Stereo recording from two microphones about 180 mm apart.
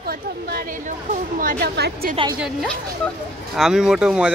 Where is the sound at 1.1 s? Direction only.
50° right (ahead or behind).